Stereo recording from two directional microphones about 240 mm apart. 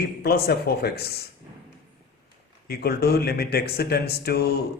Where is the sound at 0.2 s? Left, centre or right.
Left.